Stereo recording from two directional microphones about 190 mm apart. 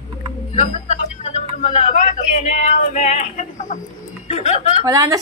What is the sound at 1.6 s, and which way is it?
Speech, 35° left (ahead or behind).